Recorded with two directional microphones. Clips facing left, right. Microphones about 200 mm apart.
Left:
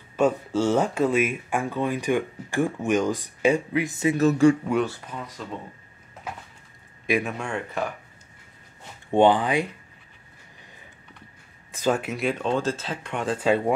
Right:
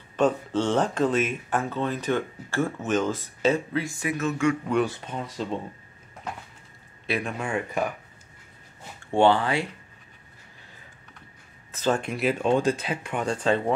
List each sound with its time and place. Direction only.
0.1 s speech: 10° left (ahead or behind); by 4.6 s 35° left (ahead or behind)
4.8 s speech: 25° right (ahead or behind)
7.1 s speech: 15° left (ahead or behind)
7.3 s speech: 5° right (ahead or behind)
9.1 s speech: 15° left (ahead or behind)
11.7 s speech: 10° left (ahead or behind)